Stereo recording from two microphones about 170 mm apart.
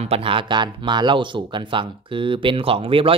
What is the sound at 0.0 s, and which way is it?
Speech, 35° right (ahead or behind).